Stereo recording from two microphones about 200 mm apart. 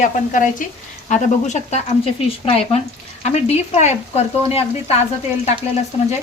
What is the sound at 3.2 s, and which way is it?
Speech, 35° left (ahead or behind).